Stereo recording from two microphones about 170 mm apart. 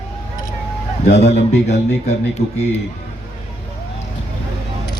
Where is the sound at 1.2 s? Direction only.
40° left (ahead or behind).